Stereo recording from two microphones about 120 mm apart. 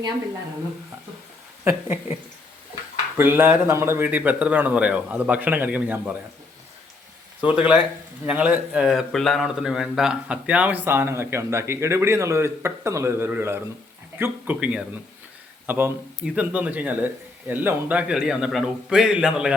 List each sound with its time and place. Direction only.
1.6 s speech: 20° right (ahead or behind)
3.2 s a man's voice: 20° right (ahead or behind)
7.4 s a man's voice: 10° right (ahead or behind)